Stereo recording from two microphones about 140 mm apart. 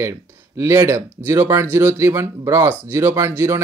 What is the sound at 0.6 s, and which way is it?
Speech, 20° right (ahead or behind).